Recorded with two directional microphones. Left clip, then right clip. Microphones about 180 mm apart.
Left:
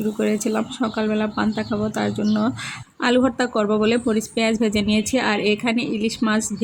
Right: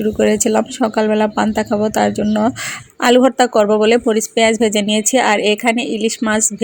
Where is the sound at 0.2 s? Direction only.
35° right (ahead or behind).